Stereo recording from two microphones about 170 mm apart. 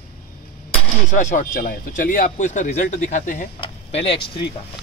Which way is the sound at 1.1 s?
50° left (ahead or behind).